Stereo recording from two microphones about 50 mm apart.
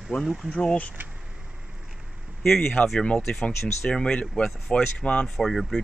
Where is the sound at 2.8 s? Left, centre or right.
Left.